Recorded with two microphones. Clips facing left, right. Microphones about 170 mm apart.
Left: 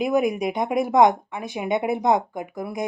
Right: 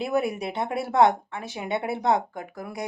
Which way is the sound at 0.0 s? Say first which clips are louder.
Left 5 dB; 15° left (ahead or behind).